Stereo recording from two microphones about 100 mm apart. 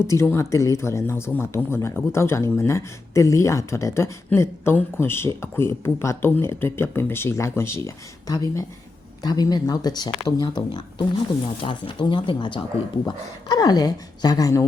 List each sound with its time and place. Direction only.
0.0 s speech: 25° left (ahead or behind); by 11.0 s 45° left (ahead or behind)
11.6 s speech: 55° left (ahead or behind)
13.1 s a woman's voice: 40° left (ahead or behind)